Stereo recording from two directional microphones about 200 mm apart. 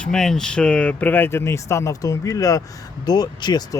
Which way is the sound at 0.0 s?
5° left (ahead or behind).